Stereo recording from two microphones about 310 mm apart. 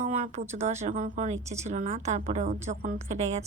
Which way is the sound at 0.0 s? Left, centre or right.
Right.